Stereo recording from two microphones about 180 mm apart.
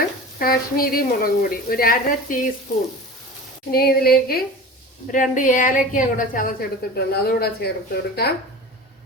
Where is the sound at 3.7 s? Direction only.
60° left (ahead or behind).